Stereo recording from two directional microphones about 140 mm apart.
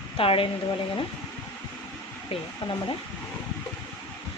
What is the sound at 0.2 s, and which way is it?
Speech, 40° left (ahead or behind).